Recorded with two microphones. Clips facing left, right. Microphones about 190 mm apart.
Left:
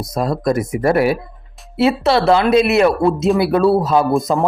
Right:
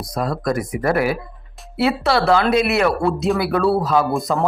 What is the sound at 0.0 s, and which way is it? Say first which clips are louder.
Speech: left 4 dB; 25° left (ahead or behind).